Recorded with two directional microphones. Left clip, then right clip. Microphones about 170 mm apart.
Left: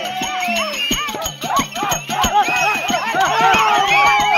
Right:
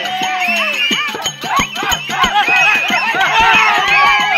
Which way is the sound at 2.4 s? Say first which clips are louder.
Right 5 dB; 40° left (ahead or behind).